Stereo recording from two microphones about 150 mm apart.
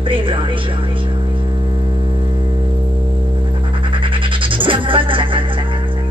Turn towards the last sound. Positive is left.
turn(degrees=-35)  # may be behind; listen again after turning